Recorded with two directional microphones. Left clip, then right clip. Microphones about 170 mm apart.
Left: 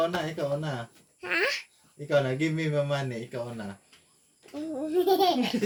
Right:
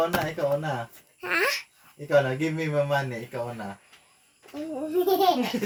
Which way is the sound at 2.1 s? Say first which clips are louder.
Right 3 dB; 5° right (ahead or behind).